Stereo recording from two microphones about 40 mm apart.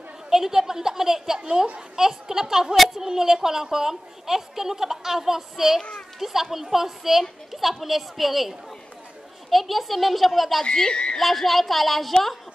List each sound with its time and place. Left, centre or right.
0.3 s a woman's voice: centre
5.8 s speech: left
6.1 s a woman's voice: centre
10.6 s speech: centre
11.1 s a woman's voice: centre